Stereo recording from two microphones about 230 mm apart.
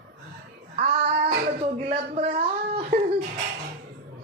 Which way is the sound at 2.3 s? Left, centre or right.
Right.